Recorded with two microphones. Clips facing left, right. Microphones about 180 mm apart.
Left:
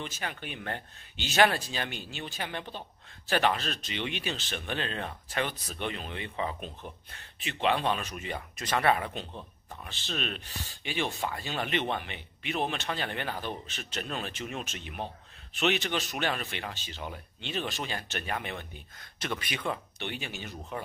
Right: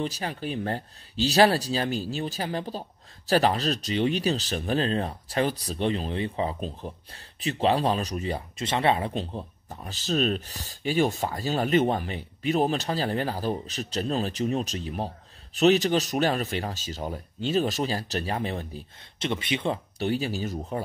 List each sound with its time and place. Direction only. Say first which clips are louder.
0.0 s speech: right 8 dB; 35° right (ahead or behind)